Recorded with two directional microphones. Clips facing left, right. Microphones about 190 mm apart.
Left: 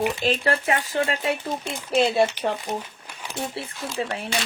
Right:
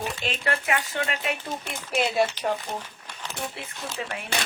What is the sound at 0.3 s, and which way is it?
Speech, 35° left (ahead or behind).